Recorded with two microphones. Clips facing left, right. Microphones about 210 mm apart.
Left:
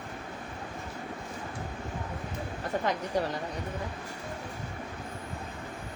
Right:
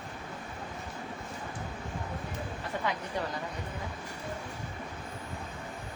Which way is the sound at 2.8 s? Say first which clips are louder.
Left 4 dB; 40° left (ahead or behind).